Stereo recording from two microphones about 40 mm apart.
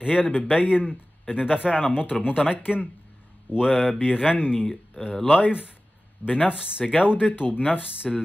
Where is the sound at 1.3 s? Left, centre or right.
Right.